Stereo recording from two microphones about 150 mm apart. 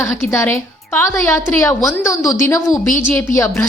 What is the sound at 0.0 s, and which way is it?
Speech, 20° left (ahead or behind).